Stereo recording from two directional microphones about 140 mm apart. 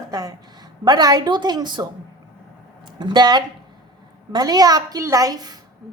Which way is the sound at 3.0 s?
30° right (ahead or behind).